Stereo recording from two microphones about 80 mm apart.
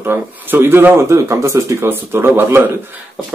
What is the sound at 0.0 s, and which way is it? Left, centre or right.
Speech, right.